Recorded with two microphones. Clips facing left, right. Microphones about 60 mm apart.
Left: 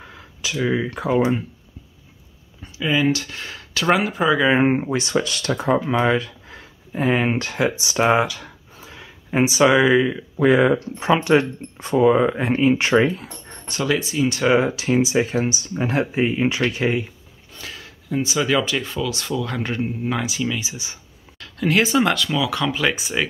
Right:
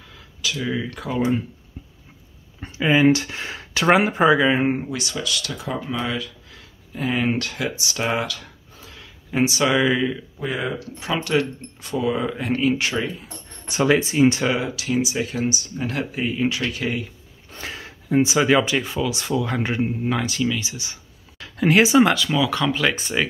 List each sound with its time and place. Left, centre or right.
0.1 s speech: left
2.8 s speech: right
4.5 s speech: left; by 10.1 s centre
10.4 s speech: left
11.0 s speech: left
13.7 s speech: right
14.6 s speech: left
17.6 s speech: right; by 19.9 s centre
20.0 s speech: centre
20.6 s speech: left
21.4 s speech: centre